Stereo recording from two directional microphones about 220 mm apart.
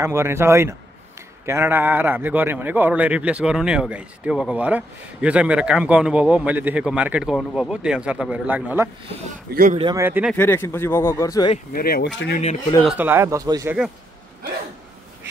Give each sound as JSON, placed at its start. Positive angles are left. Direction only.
{"t": 0.0, "sound": "a man's voice", "side_deg": -10}
{"t": 9.5, "sound": "speech", "side_deg": -40}
{"t": 9.8, "sound": "speech", "side_deg": -20}
{"t": 10.0, "sound": "speech", "side_deg": -10}
{"t": 10.3, "sound": "speech", "side_deg": 10}
{"t": 11.7, "sound": "speech", "side_deg": 45}
{"t": 12.8, "sound": "speech", "side_deg": -10}